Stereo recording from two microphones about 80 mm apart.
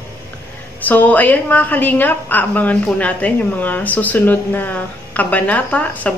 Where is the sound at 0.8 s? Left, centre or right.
Left.